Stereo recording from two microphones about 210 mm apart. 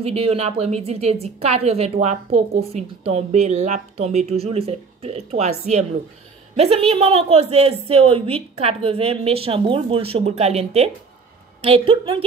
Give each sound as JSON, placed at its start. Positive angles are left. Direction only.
{"t": 0.0, "sound": "a woman's voice", "side_deg": -30}